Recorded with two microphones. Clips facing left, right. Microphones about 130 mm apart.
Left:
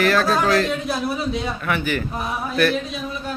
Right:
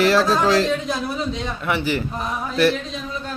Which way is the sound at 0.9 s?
5° left (ahead or behind).